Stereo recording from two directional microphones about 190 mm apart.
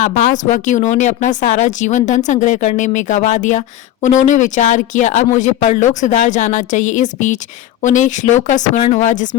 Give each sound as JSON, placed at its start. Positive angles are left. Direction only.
{"t": 0.0, "sound": "speech", "side_deg": 40}